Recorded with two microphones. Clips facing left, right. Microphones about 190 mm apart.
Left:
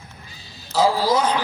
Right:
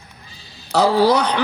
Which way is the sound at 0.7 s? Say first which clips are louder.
Right 4 dB; 65° right (ahead or behind).